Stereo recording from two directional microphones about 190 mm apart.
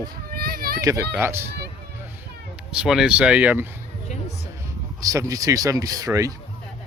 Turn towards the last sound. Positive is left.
turn(degrees=-15)  # may be behind; listen again after turning